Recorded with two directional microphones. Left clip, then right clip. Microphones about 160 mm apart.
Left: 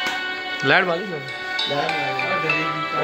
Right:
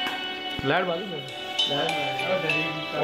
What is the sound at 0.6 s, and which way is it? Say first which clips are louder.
Speech: left 7 dB; 20° left (ahead or behind).